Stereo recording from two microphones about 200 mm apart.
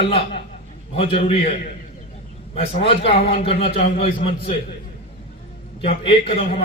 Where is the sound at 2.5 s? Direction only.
30° left (ahead or behind).